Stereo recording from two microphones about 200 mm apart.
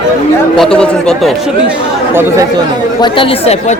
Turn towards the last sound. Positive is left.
turn(degrees=25)  # may be behind; listen again after turning